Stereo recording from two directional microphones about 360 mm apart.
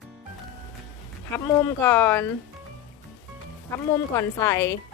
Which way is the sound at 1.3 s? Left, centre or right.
Centre.